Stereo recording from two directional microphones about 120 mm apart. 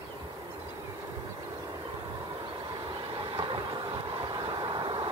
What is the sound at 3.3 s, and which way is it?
Vehicle, 40° right (ahead or behind).